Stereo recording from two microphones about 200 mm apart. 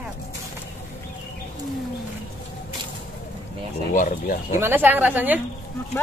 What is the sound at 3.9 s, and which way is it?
Speech, 40° left (ahead or behind).